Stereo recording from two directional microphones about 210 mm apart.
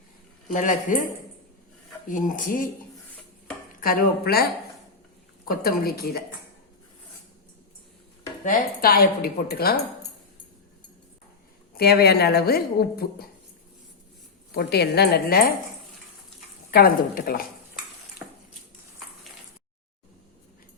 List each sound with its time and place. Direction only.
0.4 s speech: 35° left (ahead or behind)
2.0 s speech: 40° left (ahead or behind)
3.8 s a woman's voice: 45° left (ahead or behind)
5.5 s a woman's voice: 45° left (ahead or behind)
8.4 s a woman's voice: 45° left (ahead or behind)
11.7 s a woman's voice: 50° left (ahead or behind)
14.5 s a woman's voice: 50° left (ahead or behind)
16.7 s a woman's voice: 45° left (ahead or behind)